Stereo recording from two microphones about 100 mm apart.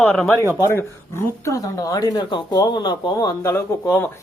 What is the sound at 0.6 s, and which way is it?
Speech, 25° left (ahead or behind).